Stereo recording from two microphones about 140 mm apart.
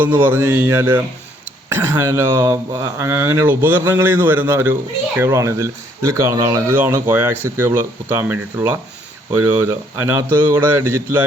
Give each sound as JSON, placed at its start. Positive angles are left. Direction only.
{"t": 0.2, "sound": "speech", "side_deg": -15}